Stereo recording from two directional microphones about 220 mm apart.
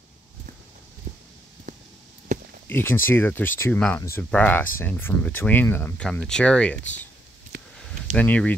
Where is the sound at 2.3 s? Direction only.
35° right (ahead or behind).